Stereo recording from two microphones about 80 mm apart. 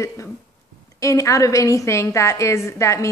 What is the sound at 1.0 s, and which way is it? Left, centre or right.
A woman's voice, left.